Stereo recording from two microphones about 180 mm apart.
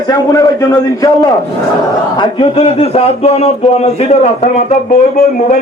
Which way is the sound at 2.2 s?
30° left (ahead or behind).